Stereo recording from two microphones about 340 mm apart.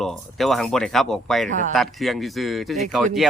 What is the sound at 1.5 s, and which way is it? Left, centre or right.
Speech, right.